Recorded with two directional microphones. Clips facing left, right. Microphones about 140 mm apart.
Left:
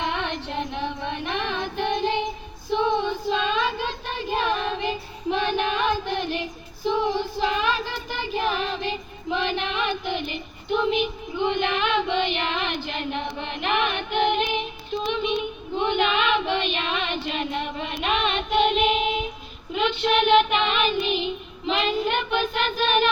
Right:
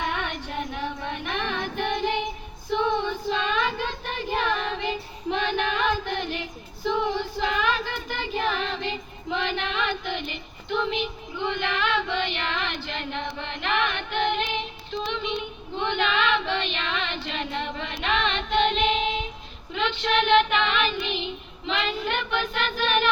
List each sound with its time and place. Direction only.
0.0 s female singing: 20° left (ahead or behind)
5.5 s music: 20° left (ahead or behind)
6.3 s child singing: 20° left (ahead or behind)
10.3 s female singing: 15° left (ahead or behind)
19.7 s child singing: 15° left (ahead or behind)